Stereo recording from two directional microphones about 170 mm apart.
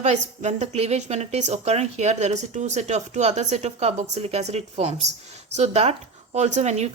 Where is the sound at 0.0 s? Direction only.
40° right (ahead or behind).